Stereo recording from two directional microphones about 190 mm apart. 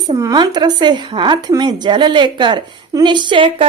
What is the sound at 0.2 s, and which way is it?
A woman's voice, 20° right (ahead or behind).